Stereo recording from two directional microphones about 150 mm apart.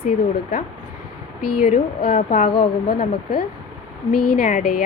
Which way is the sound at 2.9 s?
90° left.